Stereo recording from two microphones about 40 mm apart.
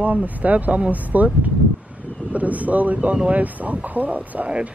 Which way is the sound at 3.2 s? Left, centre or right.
Right.